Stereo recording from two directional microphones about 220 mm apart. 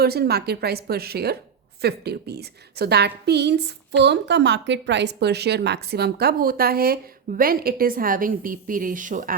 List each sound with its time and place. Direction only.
0.0 s a woman's voice: 45° right (ahead or behind)